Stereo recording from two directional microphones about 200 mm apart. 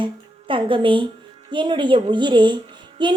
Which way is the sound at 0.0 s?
25° right (ahead or behind).